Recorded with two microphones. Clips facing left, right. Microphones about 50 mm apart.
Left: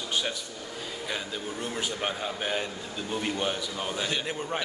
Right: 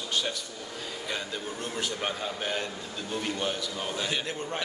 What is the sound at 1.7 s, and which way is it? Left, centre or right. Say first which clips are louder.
A man's voice: even; centre.